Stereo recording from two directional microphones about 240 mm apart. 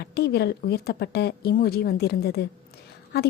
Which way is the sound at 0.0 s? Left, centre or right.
Left.